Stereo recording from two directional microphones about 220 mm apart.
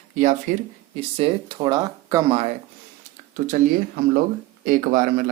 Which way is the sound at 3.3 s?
40° right (ahead or behind).